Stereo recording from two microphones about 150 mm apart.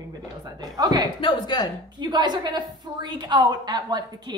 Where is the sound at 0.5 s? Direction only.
25° right (ahead or behind).